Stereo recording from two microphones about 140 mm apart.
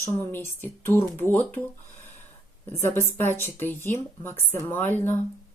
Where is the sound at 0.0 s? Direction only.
15° left (ahead or behind).